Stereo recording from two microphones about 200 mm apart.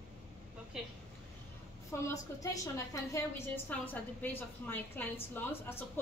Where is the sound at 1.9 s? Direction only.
15° left (ahead or behind).